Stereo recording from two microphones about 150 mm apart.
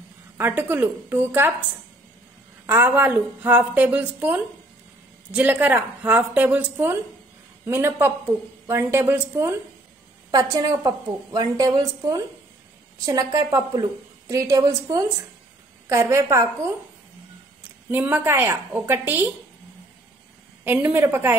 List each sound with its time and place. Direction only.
0.4 s a woman's voice: 15° right (ahead or behind)
2.6 s a woman's voice: 10° right (ahead or behind)
17.9 s a woman's voice: 10° right (ahead or behind)
20.6 s a woman's voice: 10° right (ahead or behind)